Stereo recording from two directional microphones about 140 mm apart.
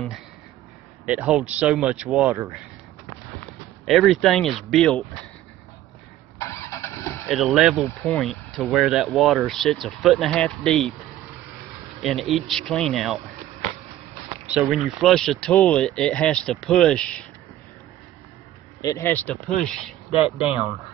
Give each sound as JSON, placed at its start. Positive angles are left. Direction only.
{"t": 1.0, "sound": "speech", "side_deg": -5}
{"t": 3.8, "sound": "speech", "side_deg": 0}
{"t": 6.3, "sound": "vehicle", "side_deg": 20}
{"t": 7.2, "sound": "speech", "side_deg": 0}
{"t": 12.0, "sound": "speech", "side_deg": 0}
{"t": 14.5, "sound": "speech", "side_deg": -5}
{"t": 18.8, "sound": "a man's voice", "side_deg": 25}
{"t": 19.0, "sound": "speech", "side_deg": 10}
{"t": 20.2, "sound": "speech", "side_deg": -10}